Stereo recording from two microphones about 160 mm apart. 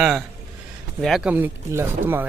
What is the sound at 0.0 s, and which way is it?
A man's voice, centre (ahead or behind).